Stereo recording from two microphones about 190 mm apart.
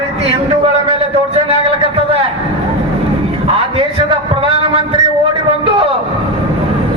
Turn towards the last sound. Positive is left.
turn(degrees=-25)  # may be behind; listen again after turning